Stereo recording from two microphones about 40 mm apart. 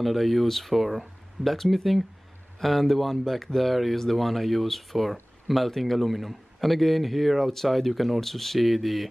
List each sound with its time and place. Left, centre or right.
0.0 s speech: centre